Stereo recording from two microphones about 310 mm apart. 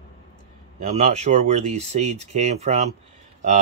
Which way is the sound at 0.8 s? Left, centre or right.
Right.